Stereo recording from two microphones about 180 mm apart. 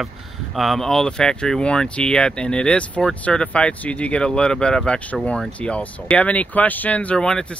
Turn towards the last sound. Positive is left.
turn(degrees=5)  # may be behind; listen again after turning